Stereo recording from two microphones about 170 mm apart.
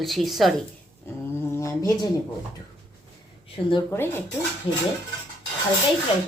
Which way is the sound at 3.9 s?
10° left (ahead or behind).